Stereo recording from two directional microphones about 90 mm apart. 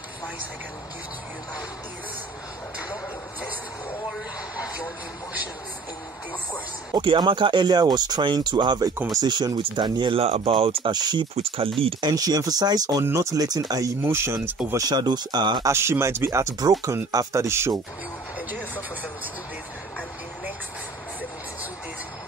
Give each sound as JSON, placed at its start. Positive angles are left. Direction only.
{"t": 6.9, "sound": "speech", "side_deg": -55}
{"t": 10.9, "sound": "speech", "side_deg": -55}
{"t": 11.4, "sound": "speech", "side_deg": -90}
{"t": 12.0, "sound": "speech", "side_deg": -45}
{"t": 13.0, "sound": "speech", "side_deg": -35}
{"t": 14.0, "sound": "speech", "side_deg": -30}
{"t": 14.8, "sound": "speech", "side_deg": -50}
{"t": 15.6, "sound": "speech", "side_deg": -30}